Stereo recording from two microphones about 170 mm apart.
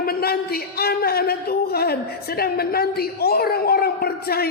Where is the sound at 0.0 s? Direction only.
65° left (ahead or behind).